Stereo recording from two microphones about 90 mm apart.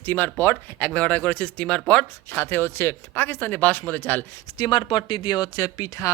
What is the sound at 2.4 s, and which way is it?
Speech, 25° left (ahead or behind).